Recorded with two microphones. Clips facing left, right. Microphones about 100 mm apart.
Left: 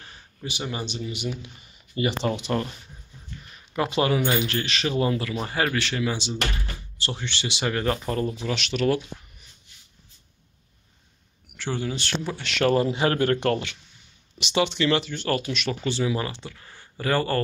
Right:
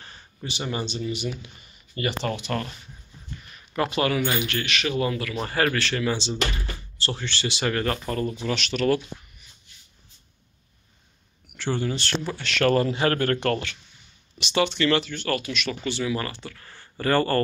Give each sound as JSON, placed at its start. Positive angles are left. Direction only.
{"t": 0.0, "sound": "speech", "side_deg": 5}
{"t": 3.9, "sound": "speech", "side_deg": 25}
{"t": 5.4, "sound": "speech", "side_deg": 10}
{"t": 11.5, "sound": "speech", "side_deg": 5}